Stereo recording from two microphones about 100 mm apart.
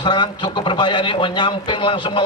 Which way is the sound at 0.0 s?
45° left (ahead or behind).